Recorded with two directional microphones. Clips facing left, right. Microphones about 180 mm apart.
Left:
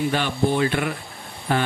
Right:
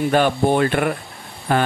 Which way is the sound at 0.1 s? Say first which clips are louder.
Right 5 dB; 50° right (ahead or behind).